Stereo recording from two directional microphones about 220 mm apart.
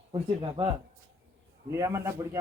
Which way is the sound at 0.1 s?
20° right (ahead or behind).